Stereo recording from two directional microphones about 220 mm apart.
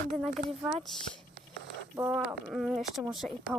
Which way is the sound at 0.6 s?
Centre (ahead or behind).